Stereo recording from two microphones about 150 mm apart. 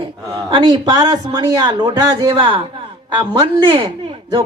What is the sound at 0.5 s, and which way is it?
A man's voice, 30° right (ahead or behind).